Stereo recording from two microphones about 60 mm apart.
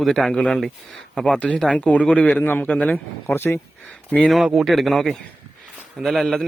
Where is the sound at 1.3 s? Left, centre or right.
Centre.